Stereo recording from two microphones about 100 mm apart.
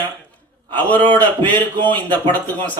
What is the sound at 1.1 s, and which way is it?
A man's voice, 15° left (ahead or behind).